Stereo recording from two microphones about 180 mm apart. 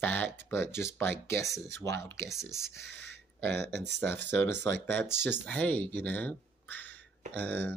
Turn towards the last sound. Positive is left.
turn(degrees=10)  # may be behind; listen again after turning